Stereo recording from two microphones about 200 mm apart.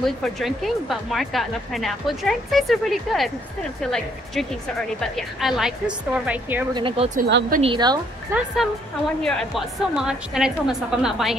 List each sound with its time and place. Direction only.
0.0 s speech: centre (ahead or behind)
6.7 s speech: 25° right (ahead or behind)
7.2 s speech: 55° right (ahead or behind)
7.6 s speech: 20° right (ahead or behind)
8.3 s speech: 5° right (ahead or behind)